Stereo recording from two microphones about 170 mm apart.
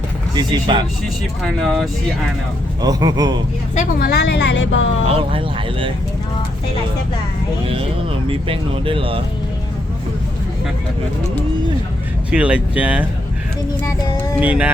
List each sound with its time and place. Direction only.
0.3 s speech: 25° right (ahead or behind)
1.0 s speech: centre (ahead or behind)
2.8 s speech: 25° right (ahead or behind)
3.8 s a woman's voice: 65° left (ahead or behind); by 4.7 s 90° left
5.0 s speech: 30° right (ahead or behind)
8.3 s speech: 30° right (ahead or behind)
12.3 s speech: 5° right (ahead or behind)
14.3 s speech: 10° right (ahead or behind)